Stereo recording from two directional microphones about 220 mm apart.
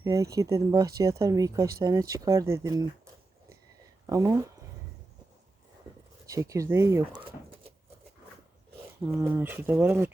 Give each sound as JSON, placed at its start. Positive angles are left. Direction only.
{"t": 0.0, "sound": "speech", "side_deg": -15}
{"t": 4.0, "sound": "speech", "side_deg": -15}
{"t": 6.2, "sound": "speech", "side_deg": -15}
{"t": 9.1, "sound": "speech", "side_deg": -10}